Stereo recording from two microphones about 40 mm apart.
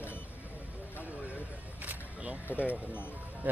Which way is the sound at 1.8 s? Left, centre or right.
Right.